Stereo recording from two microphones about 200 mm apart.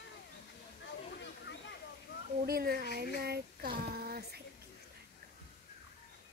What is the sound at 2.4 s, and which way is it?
Speech, 50° right (ahead or behind).